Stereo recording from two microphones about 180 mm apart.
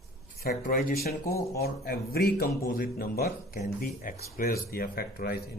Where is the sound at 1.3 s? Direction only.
15° left (ahead or behind).